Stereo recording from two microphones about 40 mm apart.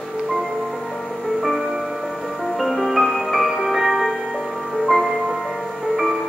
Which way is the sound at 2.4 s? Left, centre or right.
Centre.